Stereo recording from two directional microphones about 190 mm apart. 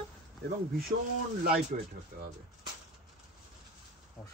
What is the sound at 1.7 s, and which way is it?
Speech, 45° right (ahead or behind).